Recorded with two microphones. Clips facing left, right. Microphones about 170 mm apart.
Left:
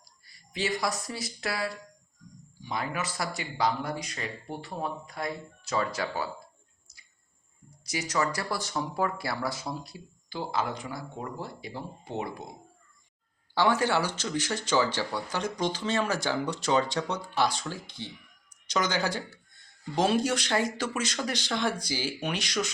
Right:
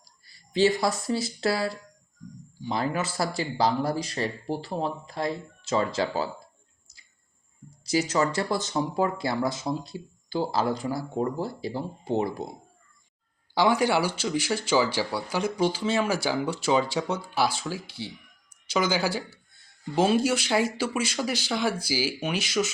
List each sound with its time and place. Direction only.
0.0 s speech: 30° right (ahead or behind)
7.9 s speech: 30° right (ahead or behind)
13.5 s speech: 10° right (ahead or behind)